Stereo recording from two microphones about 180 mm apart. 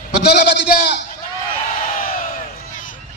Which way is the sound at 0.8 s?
65° left (ahead or behind).